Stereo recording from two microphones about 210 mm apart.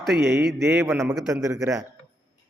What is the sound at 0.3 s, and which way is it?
Speech, 50° right (ahead or behind).